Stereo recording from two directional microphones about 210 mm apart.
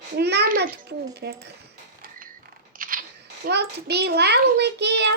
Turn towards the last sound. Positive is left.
turn(degrees=-55)  # may be behind; listen again after turning